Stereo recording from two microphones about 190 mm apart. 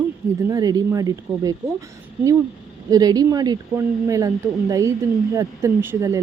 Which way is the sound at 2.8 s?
20° right (ahead or behind).